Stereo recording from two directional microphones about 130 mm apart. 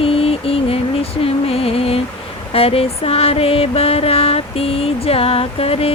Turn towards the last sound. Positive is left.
turn(degrees=50)  # may be behind; listen again after turning